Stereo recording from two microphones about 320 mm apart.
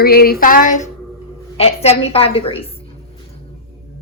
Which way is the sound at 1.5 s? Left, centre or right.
Centre.